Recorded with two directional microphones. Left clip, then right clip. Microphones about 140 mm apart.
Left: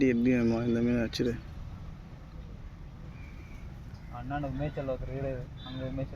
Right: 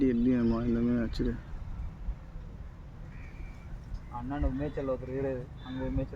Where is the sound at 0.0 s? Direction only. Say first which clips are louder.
Left 1 dB; centre (ahead or behind).